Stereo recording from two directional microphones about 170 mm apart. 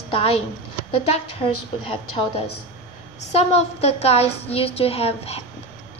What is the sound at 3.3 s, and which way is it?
A woman's voice, 35° left (ahead or behind).